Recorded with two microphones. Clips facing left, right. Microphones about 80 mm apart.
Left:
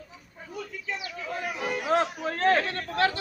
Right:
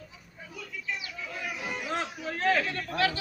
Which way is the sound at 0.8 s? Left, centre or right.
Left.